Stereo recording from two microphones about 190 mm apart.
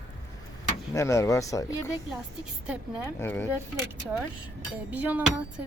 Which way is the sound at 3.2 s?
10° left (ahead or behind).